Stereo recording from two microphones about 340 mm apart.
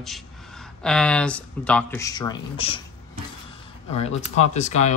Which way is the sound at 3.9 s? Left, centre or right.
Centre.